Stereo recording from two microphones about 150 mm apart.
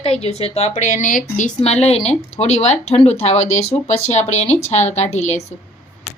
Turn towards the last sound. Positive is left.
turn(degrees=50)  # may be behind; listen again after turning